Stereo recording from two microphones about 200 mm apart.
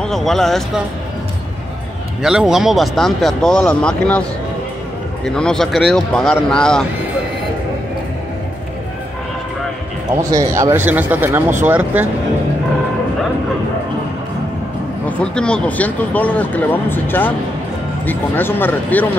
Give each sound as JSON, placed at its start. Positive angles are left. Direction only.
{"t": 0.0, "sound": "speech", "side_deg": 0}
{"t": 2.2, "sound": "speech", "side_deg": 0}
{"t": 5.2, "sound": "speech", "side_deg": 5}
{"t": 10.3, "sound": "speech", "side_deg": -15}
{"t": 15.0, "sound": "speech", "side_deg": 5}